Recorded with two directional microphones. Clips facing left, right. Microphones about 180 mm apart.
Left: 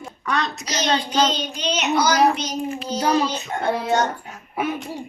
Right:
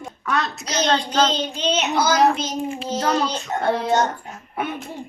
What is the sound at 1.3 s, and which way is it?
Child singing, 30° right (ahead or behind).